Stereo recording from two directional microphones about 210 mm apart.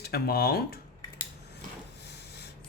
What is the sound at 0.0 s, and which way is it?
Speech, 45° left (ahead or behind).